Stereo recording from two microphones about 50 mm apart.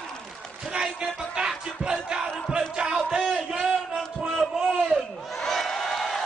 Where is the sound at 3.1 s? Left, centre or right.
Centre.